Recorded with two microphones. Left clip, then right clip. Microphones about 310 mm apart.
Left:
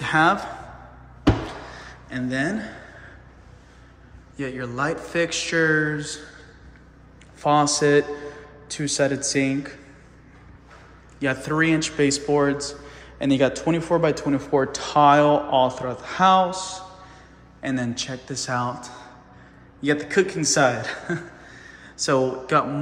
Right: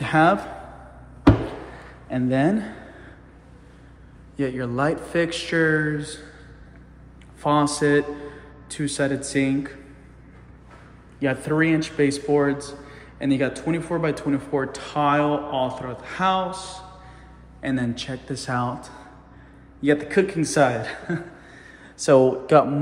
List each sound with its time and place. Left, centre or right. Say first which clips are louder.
0.0 s a man's voice: right 1 dB; centre
2.0 s speech: right 4 dB; centre
4.4 s speech: right 2 dB; centre
7.4 s speech: left 2 dB; centre
11.1 s a man's voice: even; centre